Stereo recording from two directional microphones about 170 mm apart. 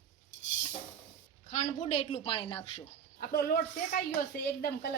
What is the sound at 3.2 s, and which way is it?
Speech, 65° left (ahead or behind).